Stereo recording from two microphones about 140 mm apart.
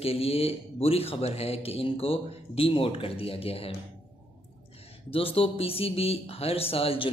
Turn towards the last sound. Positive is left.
turn(degrees=45)  # may be behind; listen again after turning